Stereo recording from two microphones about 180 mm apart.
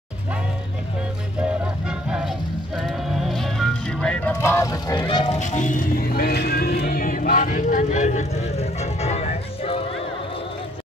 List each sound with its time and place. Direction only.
1.9 s music: 5° right (ahead or behind); by 5.4 s 30° left (ahead or behind)
5.4 s music: 45° left (ahead or behind)